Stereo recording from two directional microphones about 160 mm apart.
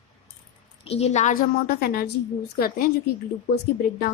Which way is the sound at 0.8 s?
40° left (ahead or behind).